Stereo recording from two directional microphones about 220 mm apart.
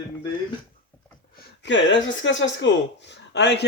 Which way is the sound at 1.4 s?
55° left (ahead or behind).